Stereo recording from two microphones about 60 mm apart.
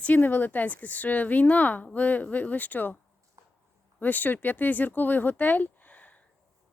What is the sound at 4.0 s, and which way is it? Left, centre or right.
Speech, left.